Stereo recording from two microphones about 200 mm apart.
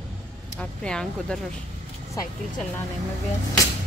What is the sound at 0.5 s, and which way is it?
Speech, 5° left (ahead or behind).